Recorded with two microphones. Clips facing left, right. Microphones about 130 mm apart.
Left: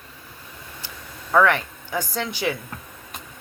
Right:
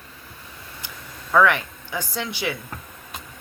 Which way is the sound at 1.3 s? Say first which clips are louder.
Even; 35° left (ahead or behind).